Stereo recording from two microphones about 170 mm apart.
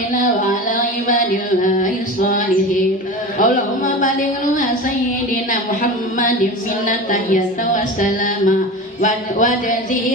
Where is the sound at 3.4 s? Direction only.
50° left (ahead or behind).